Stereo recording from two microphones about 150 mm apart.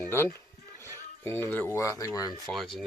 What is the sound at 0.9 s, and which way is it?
Speech, 15° left (ahead or behind).